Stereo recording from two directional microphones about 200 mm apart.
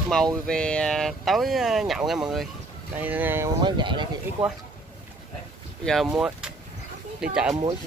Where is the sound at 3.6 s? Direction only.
25° right (ahead or behind).